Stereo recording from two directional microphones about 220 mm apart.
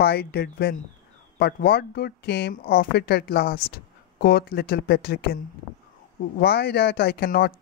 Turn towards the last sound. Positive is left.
turn(degrees=45)  # may be behind; listen again after turning